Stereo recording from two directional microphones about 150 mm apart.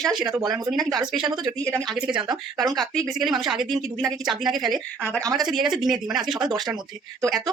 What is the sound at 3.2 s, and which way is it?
Speech, centre (ahead or behind).